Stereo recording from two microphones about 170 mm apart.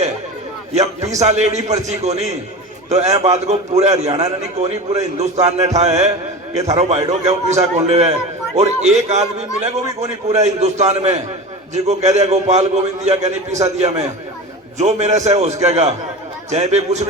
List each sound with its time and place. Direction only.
1.2 s a man's voice: 40° right (ahead or behind)